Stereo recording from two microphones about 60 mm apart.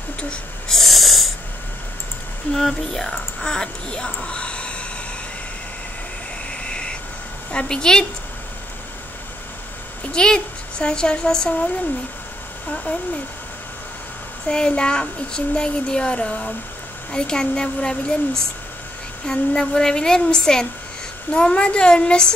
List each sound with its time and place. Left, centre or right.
0.7 s snoring: centre
2.5 s speech: centre
6.6 s a sound: centre
7.5 s speech: centre
10.1 s a woman's voice: centre
14.5 s speech: centre